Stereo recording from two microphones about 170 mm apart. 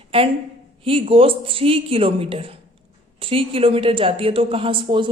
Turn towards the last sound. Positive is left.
turn(degrees=-30)  # may be behind; listen again after turning